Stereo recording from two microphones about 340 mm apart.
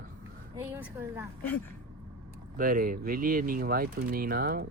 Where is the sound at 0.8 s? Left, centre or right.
Centre.